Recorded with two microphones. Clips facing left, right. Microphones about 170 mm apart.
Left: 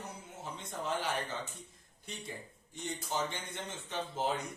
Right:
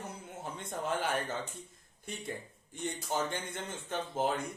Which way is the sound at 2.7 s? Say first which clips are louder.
Right 2 dB; 55° right (ahead or behind).